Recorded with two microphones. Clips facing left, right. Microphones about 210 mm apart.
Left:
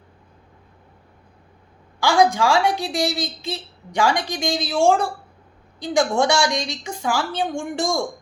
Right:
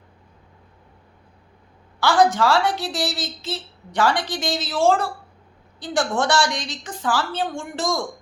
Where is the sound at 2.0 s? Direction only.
10° left (ahead or behind).